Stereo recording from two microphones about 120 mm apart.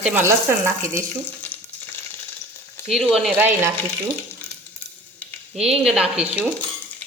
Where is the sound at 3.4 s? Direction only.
15° right (ahead or behind).